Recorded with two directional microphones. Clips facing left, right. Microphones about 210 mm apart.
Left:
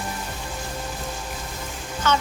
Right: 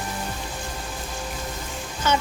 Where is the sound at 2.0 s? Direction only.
10° right (ahead or behind).